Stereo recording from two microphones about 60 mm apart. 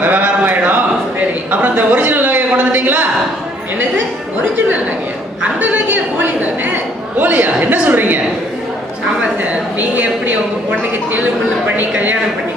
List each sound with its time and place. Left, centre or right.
0.0 s a sound: right
5.4 s a woman's voice: right
9.2 s a woman's voice: right